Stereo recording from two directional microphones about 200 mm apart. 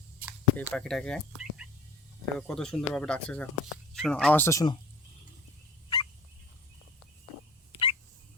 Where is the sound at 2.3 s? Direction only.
5° left (ahead or behind); by 4.8 s 20° left (ahead or behind).